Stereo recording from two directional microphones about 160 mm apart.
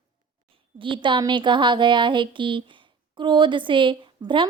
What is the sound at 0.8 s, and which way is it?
Speech, 30° right (ahead or behind).